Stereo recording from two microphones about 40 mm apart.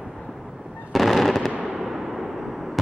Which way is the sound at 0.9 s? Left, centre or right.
Centre.